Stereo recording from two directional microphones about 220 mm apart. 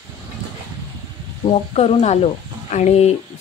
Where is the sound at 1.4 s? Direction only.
25° left (ahead or behind).